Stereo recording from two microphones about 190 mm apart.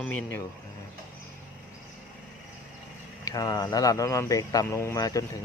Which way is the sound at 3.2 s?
20° left (ahead or behind).